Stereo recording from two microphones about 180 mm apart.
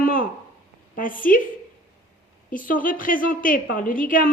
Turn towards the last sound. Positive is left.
turn(degrees=50)  # may be behind; listen again after turning